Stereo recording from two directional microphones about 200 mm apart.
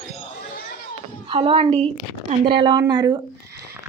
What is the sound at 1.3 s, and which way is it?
A woman's voice, 25° right (ahead or behind).